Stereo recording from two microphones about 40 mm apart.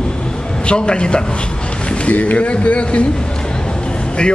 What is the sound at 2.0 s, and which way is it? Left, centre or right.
A man's voice, left.